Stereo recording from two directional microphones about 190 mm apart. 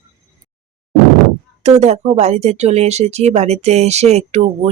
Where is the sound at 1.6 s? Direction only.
35° right (ahead or behind).